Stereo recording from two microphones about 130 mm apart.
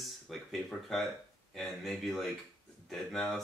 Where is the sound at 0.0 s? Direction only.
Centre (ahead or behind).